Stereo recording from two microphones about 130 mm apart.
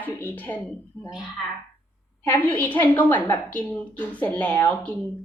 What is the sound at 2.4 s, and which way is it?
A woman's voice, 15° left (ahead or behind).